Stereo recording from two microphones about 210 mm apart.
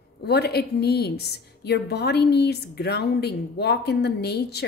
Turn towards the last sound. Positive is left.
turn(degrees=50)  # may be behind; listen again after turning